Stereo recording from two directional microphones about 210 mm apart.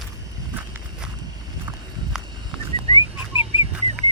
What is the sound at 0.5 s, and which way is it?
Walk, 10° right (ahead or behind).